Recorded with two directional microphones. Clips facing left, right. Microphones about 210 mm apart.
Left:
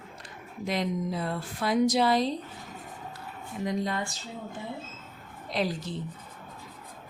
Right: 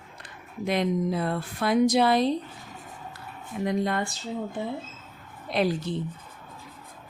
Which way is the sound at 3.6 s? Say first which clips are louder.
Right 4 dB; 60° right (ahead or behind).